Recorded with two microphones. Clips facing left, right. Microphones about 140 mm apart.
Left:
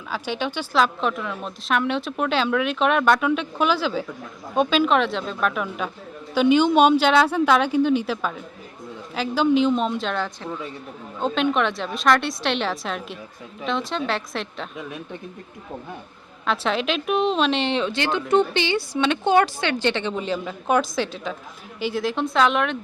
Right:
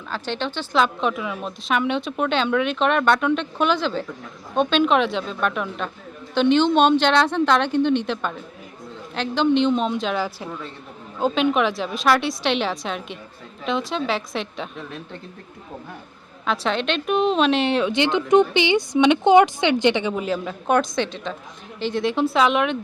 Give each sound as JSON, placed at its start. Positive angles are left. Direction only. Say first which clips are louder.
{"t": 0.1, "sound": "speech", "louder": "even", "side_deg": 10}
{"t": 0.8, "sound": "a woman's voice", "louder": "right 1 dB", "side_deg": 0}
{"t": 14.8, "sound": "speech", "louder": "left 1 dB", "side_deg": 10}
{"t": 16.5, "sound": "a woman's voice", "louder": "even", "side_deg": 0}
{"t": 17.9, "sound": "a woman's voice", "louder": "right 4 dB", "side_deg": -20}